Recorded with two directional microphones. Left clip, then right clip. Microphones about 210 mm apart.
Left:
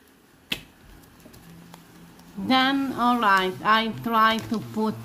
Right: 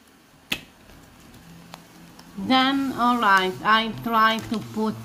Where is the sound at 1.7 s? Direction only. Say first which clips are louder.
Right 7 dB; 25° right (ahead or behind).